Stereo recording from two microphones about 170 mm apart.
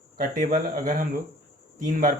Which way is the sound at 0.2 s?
55° right (ahead or behind).